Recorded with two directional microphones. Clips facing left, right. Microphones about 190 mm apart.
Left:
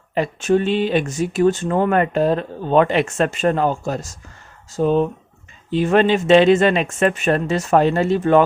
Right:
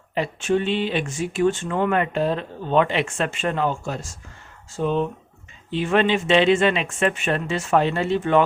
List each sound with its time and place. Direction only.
0.1 s speech: 45° left (ahead or behind)